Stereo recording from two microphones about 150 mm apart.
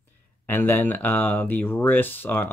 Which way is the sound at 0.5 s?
15° left (ahead or behind).